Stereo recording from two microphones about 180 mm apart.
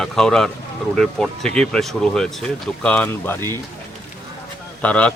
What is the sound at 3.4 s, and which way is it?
Speech, 20° right (ahead or behind).